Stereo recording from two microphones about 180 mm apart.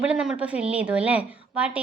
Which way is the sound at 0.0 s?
5° right (ahead or behind).